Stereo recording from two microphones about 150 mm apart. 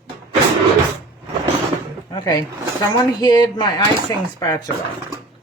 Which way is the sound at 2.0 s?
30° left (ahead or behind).